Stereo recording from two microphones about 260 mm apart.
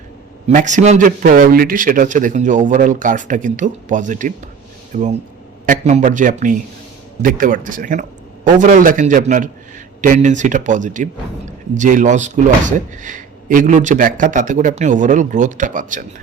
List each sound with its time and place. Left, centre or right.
0.4 s speech: right